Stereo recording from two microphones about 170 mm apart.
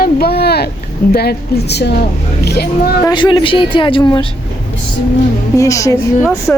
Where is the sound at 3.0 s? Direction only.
25° left (ahead or behind).